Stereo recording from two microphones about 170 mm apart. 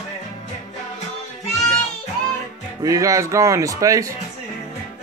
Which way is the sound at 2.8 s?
20° right (ahead or behind).